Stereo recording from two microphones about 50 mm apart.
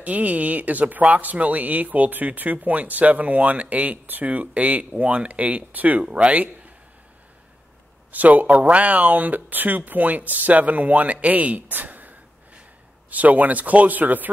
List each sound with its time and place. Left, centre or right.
0.0 s speech: right
8.1 s speech: right